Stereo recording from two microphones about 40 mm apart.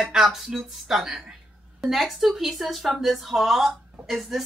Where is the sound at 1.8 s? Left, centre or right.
Centre.